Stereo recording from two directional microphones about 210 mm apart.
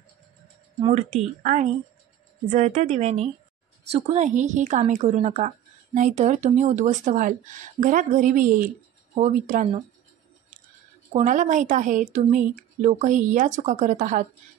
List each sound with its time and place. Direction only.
0.7 s a woman's voice: 30° right (ahead or behind)
11.1 s a woman's voice: 35° right (ahead or behind)